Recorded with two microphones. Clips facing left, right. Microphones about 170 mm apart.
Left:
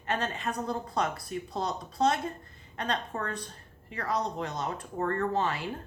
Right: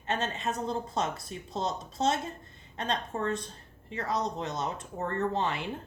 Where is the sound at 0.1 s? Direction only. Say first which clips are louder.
Even; 25° right (ahead or behind).